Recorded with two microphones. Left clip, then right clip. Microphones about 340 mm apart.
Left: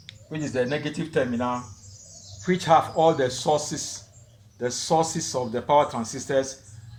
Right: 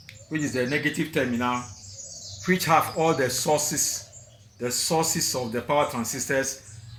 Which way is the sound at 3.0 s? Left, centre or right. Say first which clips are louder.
Left 2 dB; centre.